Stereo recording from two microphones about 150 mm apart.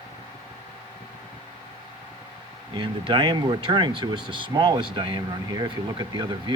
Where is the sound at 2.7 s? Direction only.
30° right (ahead or behind).